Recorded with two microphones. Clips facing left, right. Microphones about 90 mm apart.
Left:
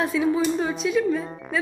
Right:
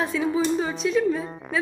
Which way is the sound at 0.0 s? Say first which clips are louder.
Left 2 dB; centre (ahead or behind).